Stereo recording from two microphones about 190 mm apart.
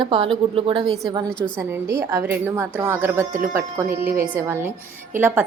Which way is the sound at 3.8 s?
50° right (ahead or behind).